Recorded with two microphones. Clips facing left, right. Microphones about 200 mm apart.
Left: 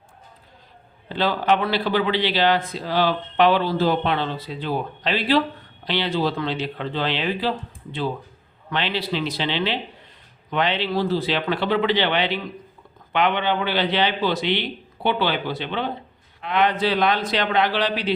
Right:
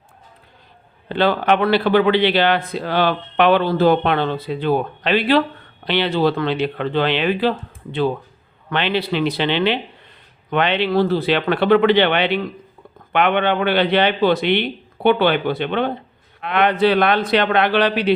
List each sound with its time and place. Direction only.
1.0 s speech: 60° right (ahead or behind)
8.7 s speech: 60° right (ahead or behind)